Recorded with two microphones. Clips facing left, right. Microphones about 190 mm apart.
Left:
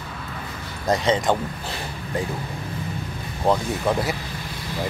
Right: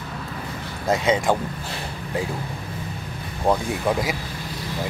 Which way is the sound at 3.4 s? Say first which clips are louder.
Even; 10° right (ahead or behind).